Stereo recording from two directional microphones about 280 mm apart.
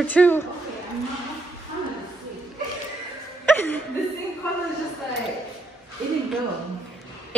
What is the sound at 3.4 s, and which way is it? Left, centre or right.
Chuckle, centre.